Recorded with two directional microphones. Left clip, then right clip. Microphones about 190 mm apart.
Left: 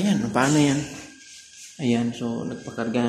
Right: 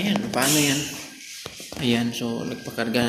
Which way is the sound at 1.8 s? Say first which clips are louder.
Right 1 dB; 25° left (ahead or behind).